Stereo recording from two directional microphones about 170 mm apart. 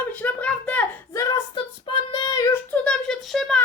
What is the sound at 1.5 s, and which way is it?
Child singing, 30° left (ahead or behind).